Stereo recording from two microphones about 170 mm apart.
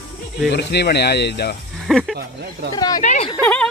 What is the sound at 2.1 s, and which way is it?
Speech, 70° right (ahead or behind).